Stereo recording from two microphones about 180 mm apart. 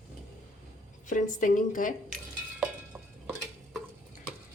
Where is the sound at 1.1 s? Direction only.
45° left (ahead or behind).